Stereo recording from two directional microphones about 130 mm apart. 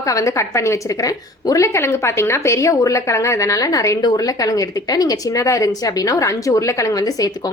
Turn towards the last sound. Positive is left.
turn(degrees=25)  # may be behind; listen again after turning